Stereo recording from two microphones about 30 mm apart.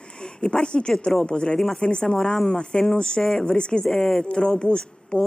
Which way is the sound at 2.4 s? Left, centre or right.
Left.